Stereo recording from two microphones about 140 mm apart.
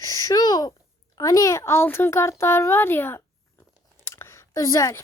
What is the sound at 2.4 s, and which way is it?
Speech, 15° left (ahead or behind).